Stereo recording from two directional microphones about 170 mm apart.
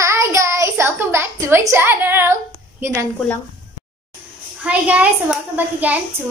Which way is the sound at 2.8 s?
15° right (ahead or behind).